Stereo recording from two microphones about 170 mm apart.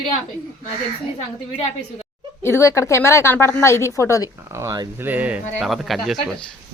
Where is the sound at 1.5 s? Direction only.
35° left (ahead or behind).